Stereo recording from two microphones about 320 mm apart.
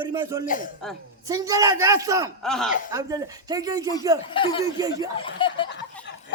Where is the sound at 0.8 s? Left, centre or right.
Centre.